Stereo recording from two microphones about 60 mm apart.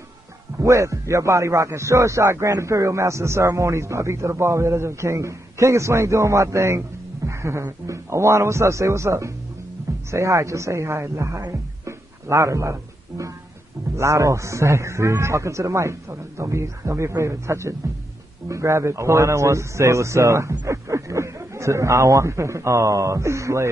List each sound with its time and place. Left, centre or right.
0.6 s a man's voice: right